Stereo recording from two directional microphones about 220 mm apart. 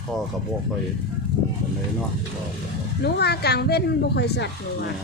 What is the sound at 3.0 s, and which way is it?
A woman's voice, 45° left (ahead or behind).